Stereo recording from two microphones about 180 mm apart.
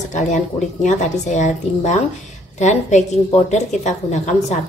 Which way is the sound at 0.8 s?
40° left (ahead or behind).